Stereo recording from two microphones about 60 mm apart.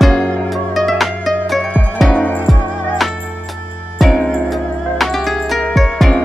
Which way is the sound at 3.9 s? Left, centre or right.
Centre.